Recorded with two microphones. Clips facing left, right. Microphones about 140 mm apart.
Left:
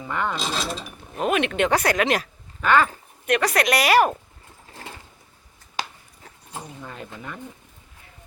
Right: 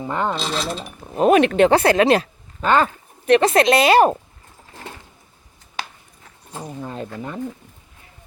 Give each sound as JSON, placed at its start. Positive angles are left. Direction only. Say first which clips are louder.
{"t": 0.0, "sound": "speech", "louder": "right 4 dB", "side_deg": -30}
{"t": 6.8, "sound": "speech", "louder": "right 7 dB", "side_deg": -30}